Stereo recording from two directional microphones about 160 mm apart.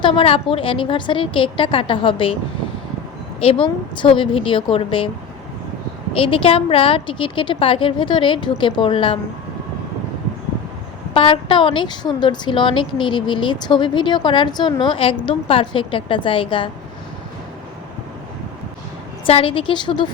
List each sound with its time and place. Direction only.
0.0 s a woman's voice: 35° left (ahead or behind)
3.4 s a woman's voice: 35° left (ahead or behind)
6.1 s a woman's voice: 35° left (ahead or behind)
11.1 s a woman's voice: 35° left (ahead or behind)
19.2 s a woman's voice: 35° left (ahead or behind)